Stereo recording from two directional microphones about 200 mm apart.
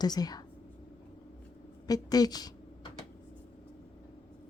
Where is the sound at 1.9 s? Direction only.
20° left (ahead or behind).